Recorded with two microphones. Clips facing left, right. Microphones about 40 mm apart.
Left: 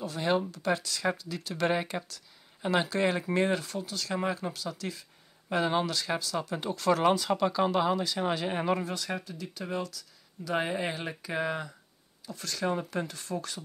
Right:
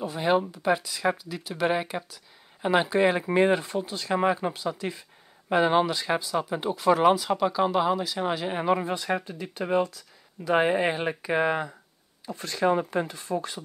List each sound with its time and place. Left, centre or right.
0.0 s speech: centre
8.8 s speech: right